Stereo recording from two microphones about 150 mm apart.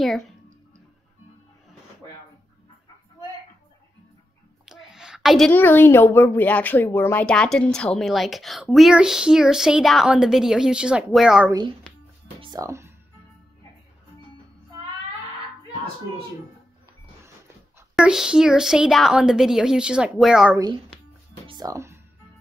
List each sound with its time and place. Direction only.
4.6 s a sound: 5° right (ahead or behind)
5.5 s a woman's voice: 10° left (ahead or behind)
11.9 s music: 5° left (ahead or behind)
12.4 s music: 25° right (ahead or behind)
17.9 s a woman's voice: 5° right (ahead or behind)
21.5 s music: 25° right (ahead or behind)